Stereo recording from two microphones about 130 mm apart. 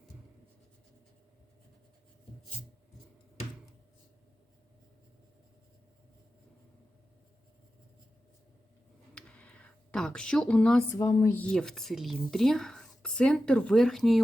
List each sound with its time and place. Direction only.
9.1 s a sound: 10° left (ahead or behind)
10.9 s speech: 25° left (ahead or behind)
11.3 s speech: 5° left (ahead or behind)